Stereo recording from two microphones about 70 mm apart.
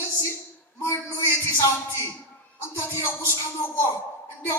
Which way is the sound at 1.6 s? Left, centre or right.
Left.